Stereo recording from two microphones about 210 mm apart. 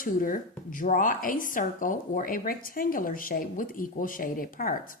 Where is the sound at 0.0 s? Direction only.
40° left (ahead or behind).